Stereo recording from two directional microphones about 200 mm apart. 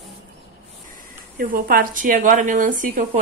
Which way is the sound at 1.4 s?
45° right (ahead or behind).